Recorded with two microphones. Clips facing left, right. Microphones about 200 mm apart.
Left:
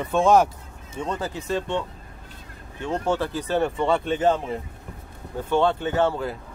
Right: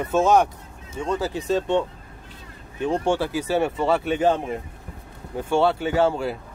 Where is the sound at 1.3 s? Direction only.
15° right (ahead or behind).